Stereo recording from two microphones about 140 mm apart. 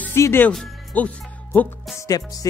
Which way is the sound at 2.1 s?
25° left (ahead or behind).